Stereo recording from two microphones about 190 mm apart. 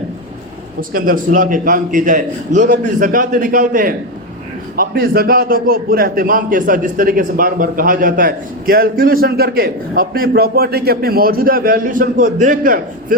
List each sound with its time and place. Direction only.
0.8 s a man's voice: 50° right (ahead or behind)